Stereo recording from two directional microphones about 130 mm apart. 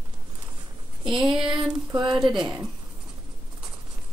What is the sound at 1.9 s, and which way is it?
Speech, 35° right (ahead or behind).